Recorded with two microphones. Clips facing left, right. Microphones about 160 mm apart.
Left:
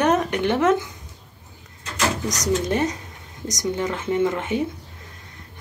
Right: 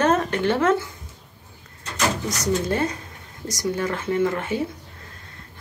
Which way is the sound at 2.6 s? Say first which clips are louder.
Left 1 dB; 20° left (ahead or behind).